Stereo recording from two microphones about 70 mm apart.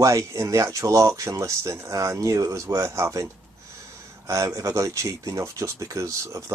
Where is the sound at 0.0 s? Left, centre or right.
Right.